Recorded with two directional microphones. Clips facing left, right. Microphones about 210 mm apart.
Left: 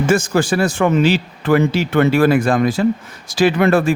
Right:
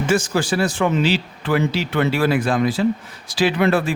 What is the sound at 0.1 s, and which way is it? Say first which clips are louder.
Speech: left 2 dB; 50° left (ahead or behind).